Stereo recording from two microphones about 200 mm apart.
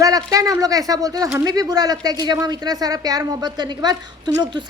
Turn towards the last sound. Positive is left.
turn(degrees=-20)  # may be behind; listen again after turning